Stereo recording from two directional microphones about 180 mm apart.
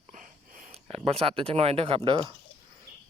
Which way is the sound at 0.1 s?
45° right (ahead or behind).